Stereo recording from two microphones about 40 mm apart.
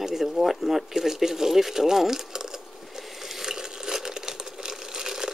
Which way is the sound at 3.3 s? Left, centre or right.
Centre.